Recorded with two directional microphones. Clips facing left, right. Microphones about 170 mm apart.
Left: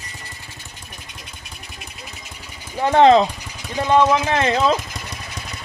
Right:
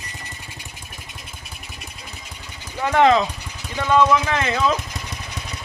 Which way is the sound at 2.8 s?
30° left (ahead or behind).